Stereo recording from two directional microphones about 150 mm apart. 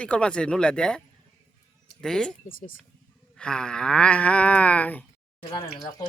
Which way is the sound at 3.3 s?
5° left (ahead or behind).